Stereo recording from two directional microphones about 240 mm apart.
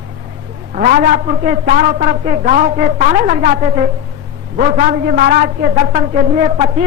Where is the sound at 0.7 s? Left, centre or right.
Right.